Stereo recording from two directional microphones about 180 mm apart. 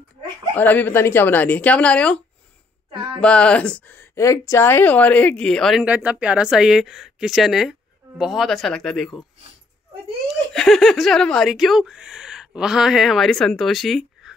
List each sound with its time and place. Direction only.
0.6 s speech: 10° left (ahead or behind)
10.5 s speech: centre (ahead or behind)